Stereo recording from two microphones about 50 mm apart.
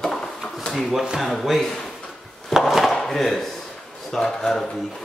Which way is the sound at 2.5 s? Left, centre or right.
Centre.